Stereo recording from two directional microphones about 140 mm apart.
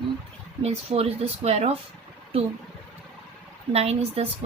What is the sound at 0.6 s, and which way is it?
Speech, 45° right (ahead or behind).